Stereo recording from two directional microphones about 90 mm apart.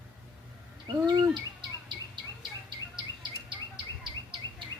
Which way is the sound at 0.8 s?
50° right (ahead or behind).